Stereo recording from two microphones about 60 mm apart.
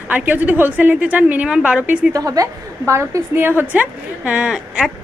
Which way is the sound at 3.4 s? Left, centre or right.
Right.